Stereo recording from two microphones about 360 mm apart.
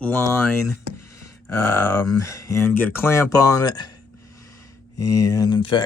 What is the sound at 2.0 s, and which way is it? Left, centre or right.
Speech, centre.